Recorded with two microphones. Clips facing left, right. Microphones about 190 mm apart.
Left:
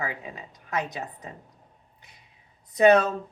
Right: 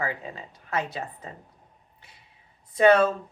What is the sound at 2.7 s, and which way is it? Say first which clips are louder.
Speech: left 1 dB; 20° left (ahead or behind).